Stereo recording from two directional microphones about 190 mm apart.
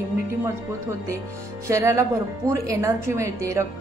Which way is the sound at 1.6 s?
15° right (ahead or behind).